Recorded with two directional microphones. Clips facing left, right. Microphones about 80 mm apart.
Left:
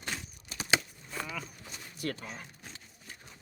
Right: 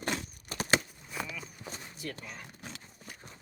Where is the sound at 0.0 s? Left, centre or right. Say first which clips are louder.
Right 5 dB; right.